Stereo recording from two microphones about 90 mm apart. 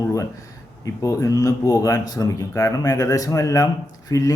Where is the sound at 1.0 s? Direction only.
40° left (ahead or behind).